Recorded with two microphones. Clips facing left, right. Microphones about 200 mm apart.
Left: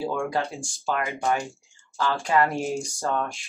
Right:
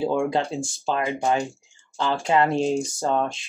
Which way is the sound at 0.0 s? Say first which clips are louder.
Right 4 dB; 20° right (ahead or behind).